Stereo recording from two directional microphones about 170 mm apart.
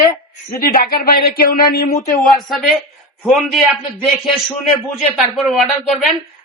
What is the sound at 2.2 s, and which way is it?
Speech, centre (ahead or behind).